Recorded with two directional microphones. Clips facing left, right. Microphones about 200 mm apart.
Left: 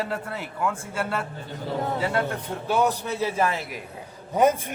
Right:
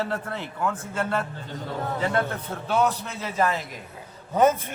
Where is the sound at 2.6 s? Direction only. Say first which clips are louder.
Left 1 dB; 10° left (ahead or behind).